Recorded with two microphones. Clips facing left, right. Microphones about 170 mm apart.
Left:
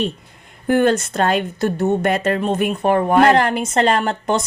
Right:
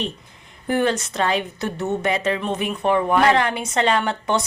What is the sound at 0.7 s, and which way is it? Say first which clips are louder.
A woman's voice: left 5 dB; 50° left (ahead or behind).